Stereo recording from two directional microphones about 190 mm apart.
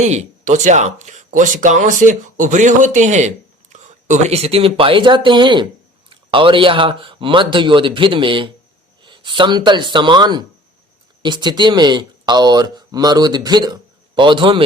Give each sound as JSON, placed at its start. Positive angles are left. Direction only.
{"t": 0.0, "sound": "speech", "side_deg": -40}